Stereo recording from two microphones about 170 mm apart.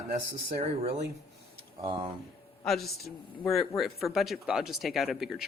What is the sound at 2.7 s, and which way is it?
Speech, centre (ahead or behind).